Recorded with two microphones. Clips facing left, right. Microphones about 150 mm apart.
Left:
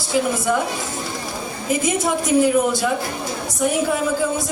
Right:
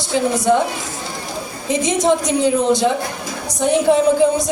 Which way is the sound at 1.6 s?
20° right (ahead or behind).